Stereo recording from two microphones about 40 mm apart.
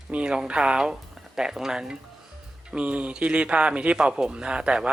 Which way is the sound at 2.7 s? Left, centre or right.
Right.